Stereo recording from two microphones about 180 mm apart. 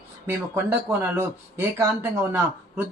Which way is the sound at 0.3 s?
10° right (ahead or behind).